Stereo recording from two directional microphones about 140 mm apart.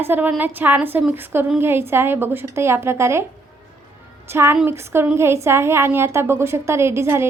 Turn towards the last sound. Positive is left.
turn(degrees=-20)  # may be behind; listen again after turning